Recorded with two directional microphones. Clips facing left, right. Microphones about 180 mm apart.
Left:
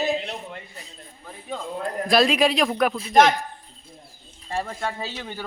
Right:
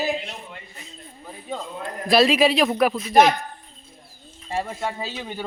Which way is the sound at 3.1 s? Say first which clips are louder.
Even; 15° right (ahead or behind).